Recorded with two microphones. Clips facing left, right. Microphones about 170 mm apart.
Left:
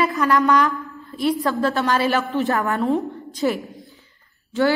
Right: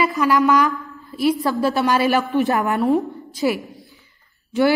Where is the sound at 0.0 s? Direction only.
Centre (ahead or behind).